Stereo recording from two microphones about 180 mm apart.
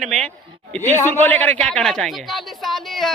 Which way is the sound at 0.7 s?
10° left (ahead or behind).